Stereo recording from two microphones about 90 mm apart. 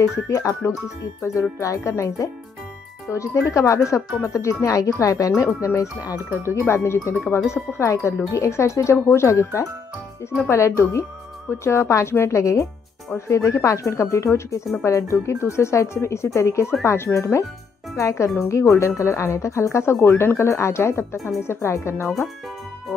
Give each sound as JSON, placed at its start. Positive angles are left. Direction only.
{"t": 0.0, "sound": "speech", "side_deg": 35}